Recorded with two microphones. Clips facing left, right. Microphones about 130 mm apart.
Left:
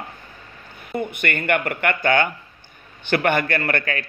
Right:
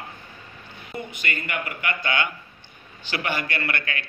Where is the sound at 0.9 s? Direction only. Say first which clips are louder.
Left 7 dB; 60° left (ahead or behind).